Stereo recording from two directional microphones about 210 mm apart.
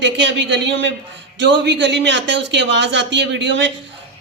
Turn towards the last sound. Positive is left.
turn(degrees=-60)  # may be behind; listen again after turning